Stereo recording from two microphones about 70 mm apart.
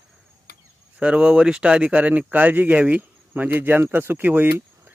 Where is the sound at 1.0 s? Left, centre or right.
Centre.